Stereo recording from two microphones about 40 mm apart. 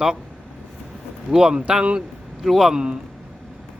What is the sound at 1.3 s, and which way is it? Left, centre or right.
Speech, centre.